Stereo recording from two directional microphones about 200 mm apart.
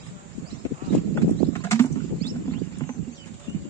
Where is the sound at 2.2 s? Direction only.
50° right (ahead or behind).